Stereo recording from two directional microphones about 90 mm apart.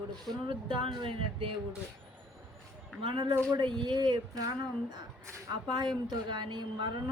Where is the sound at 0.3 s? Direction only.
65° right (ahead or behind).